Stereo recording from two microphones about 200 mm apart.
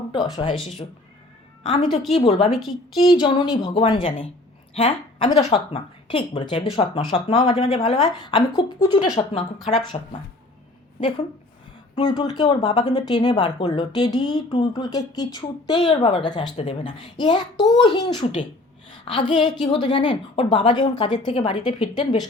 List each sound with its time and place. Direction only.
0.1 s a woman's voice: 25° left (ahead or behind)
3.1 s speech: 20° left (ahead or behind)
11.9 s speech: 20° left (ahead or behind)
16.6 s a woman's voice: 35° left (ahead or behind)
17.2 s a woman's voice: 25° left (ahead or behind)